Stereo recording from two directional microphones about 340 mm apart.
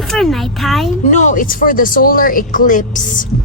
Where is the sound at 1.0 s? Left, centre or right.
Left.